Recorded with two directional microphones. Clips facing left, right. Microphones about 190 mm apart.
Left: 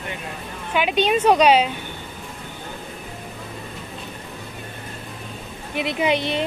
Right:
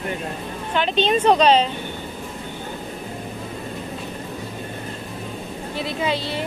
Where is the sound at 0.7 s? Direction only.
10° left (ahead or behind).